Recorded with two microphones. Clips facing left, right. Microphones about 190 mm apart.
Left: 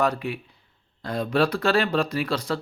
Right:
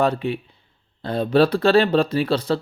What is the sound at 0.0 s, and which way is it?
Speech, 30° right (ahead or behind).